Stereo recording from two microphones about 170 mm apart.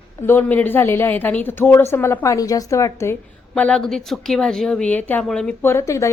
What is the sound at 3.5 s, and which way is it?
A woman's voice, 5° left (ahead or behind).